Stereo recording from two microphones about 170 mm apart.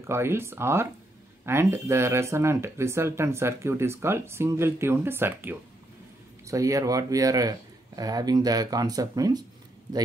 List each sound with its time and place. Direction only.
0.0 s speech: 15° right (ahead or behind)